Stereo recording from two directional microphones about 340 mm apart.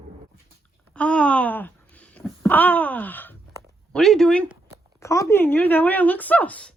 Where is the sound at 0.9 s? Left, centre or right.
Centre.